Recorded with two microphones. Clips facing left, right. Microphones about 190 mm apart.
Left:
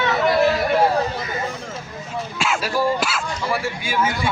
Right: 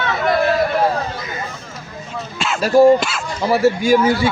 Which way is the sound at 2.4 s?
10° left (ahead or behind).